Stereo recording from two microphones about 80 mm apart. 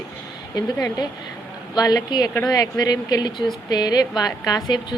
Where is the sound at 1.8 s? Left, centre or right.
Left.